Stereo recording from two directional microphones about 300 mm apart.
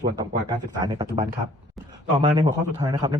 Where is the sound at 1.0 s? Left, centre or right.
Right.